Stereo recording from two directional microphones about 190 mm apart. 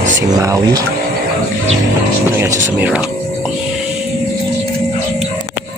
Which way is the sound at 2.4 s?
10° right (ahead or behind).